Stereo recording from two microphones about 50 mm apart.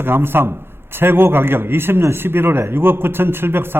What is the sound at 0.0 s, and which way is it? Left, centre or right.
A man's voice, right.